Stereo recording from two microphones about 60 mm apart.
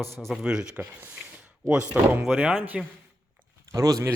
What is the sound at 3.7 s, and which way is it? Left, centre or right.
Speech, right.